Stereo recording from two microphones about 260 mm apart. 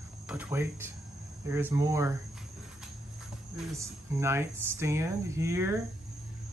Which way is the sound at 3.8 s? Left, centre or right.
Centre.